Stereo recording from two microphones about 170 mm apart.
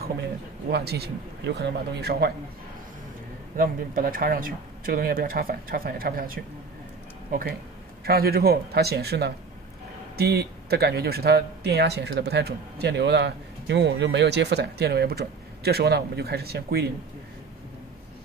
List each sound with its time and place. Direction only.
0.7 s speech: 70° right (ahead or behind)
3.5 s speech: 55° right (ahead or behind)